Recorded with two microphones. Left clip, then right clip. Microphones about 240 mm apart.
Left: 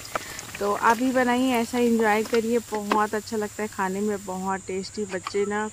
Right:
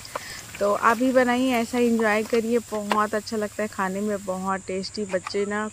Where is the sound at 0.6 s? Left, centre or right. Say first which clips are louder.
Right 1 dB; centre.